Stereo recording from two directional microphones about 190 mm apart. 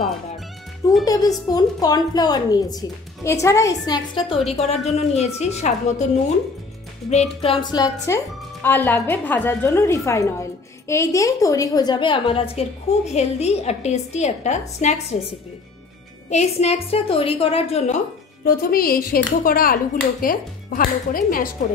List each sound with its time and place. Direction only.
1.0 s a woman's voice: 20° left (ahead or behind)
4.5 s a woman's voice: 35° left (ahead or behind)
16.3 s a woman's voice: 35° left (ahead or behind)
18.4 s a woman's voice: 50° left (ahead or behind)